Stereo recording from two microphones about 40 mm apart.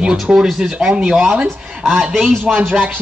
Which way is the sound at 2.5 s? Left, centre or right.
Right.